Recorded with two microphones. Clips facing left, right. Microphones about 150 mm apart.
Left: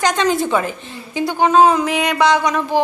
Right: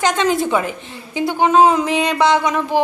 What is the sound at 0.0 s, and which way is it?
A woman's voice, 20° right (ahead or behind).